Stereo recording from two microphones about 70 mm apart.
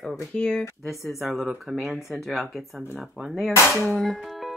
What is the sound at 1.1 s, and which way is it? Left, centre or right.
Speech, centre.